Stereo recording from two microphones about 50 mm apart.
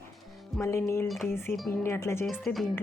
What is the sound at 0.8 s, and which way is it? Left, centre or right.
Speech, left.